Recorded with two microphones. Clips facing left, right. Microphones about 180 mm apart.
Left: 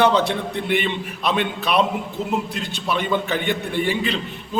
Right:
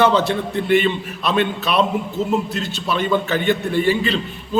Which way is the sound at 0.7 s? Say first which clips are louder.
Right 7 dB; 15° left (ahead or behind).